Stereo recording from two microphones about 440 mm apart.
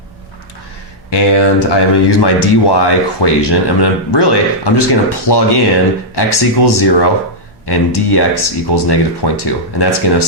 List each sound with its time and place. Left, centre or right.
1.1 s speech: left